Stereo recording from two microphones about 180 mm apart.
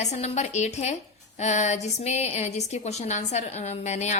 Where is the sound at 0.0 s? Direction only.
40° left (ahead or behind).